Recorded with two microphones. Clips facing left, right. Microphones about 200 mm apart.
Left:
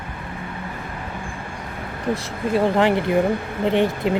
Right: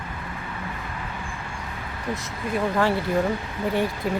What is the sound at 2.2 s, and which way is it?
Speech, 30° left (ahead or behind).